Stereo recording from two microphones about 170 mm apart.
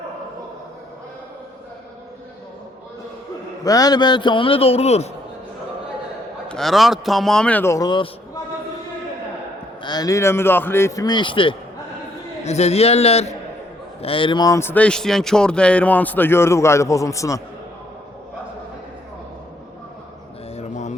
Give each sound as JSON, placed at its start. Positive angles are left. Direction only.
{"t": 3.6, "sound": "a man's voice", "side_deg": 20}
{"t": 6.5, "sound": "a man's voice", "side_deg": 0}
{"t": 9.8, "sound": "a man's voice", "side_deg": 25}
{"t": 20.6, "sound": "a sound", "side_deg": 45}